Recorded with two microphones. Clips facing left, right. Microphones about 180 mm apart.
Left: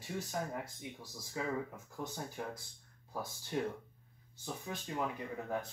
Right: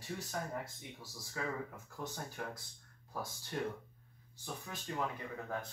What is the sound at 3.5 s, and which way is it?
Speech, 15° left (ahead or behind).